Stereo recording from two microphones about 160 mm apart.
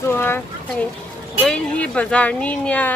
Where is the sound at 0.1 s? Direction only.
15° left (ahead or behind).